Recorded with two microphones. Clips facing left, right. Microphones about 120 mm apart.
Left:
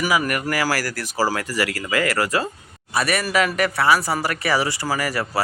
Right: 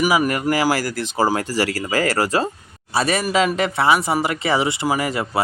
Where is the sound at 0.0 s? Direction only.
20° right (ahead or behind).